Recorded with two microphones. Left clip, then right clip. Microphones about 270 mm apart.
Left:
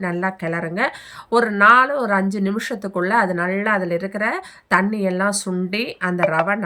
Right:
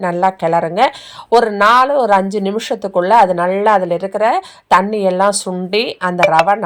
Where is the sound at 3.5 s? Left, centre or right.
Right.